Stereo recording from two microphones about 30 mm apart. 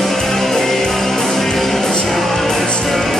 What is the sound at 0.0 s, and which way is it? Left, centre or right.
Music, centre.